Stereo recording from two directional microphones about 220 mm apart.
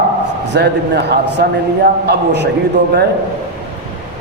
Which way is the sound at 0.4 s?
50° right (ahead or behind).